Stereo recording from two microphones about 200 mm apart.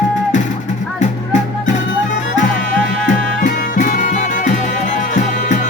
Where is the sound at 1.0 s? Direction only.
35° left (ahead or behind).